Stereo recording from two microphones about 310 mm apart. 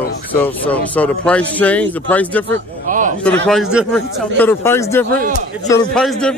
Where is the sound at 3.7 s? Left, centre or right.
Centre.